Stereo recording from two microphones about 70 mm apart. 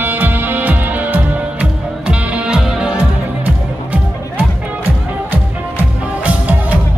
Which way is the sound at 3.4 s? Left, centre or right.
Right.